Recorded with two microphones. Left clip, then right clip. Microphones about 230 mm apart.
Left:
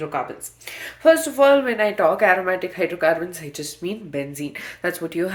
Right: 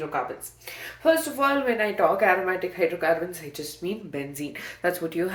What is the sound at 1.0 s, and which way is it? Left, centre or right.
Speech, left.